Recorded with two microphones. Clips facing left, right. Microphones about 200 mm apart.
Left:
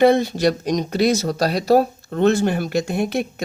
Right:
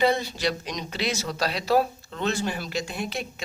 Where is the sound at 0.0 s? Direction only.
50° left (ahead or behind).